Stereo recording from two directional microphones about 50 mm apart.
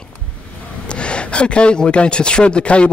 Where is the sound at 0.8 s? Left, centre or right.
Left.